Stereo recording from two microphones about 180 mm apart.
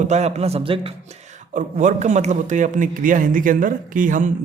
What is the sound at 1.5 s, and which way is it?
A man's voice, 45° right (ahead or behind).